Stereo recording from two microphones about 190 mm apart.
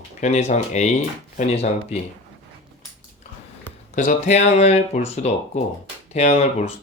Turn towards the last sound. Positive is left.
turn(degrees=35)  # may be behind; listen again after turning